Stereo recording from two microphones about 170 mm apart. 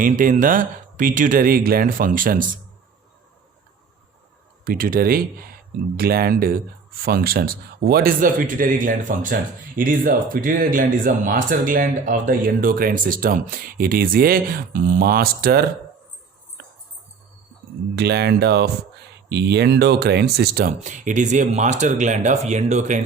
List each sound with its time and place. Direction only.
0.0 s speech: 50° right (ahead or behind)
4.6 s a man's voice: 55° right (ahead or behind)
17.9 s speech: 70° right (ahead or behind)
20.8 s speech: 45° right (ahead or behind)